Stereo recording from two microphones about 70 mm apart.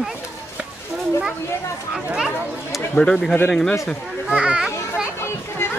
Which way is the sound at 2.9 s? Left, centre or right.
Centre.